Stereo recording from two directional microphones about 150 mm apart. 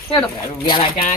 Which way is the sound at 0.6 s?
35° left (ahead or behind).